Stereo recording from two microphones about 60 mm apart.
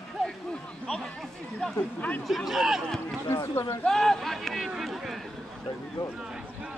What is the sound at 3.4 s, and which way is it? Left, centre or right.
Speech, left.